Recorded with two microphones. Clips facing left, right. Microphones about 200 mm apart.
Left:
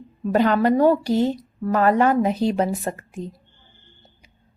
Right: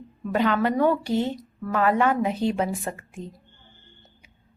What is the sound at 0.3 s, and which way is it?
A woman's voice, 40° left (ahead or behind).